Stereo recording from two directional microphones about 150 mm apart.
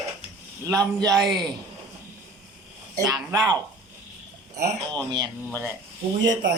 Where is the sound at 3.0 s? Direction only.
25° right (ahead or behind).